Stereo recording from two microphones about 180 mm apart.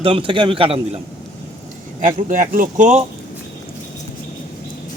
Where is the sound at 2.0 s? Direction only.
50° right (ahead or behind).